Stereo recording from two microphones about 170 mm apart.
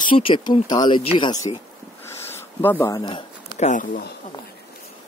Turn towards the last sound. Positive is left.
turn(degrees=50)  # may be behind; listen again after turning